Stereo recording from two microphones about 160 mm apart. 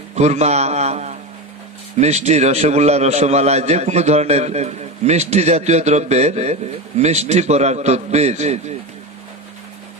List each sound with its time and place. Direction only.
0.2 s a man's voice: 45° right (ahead or behind)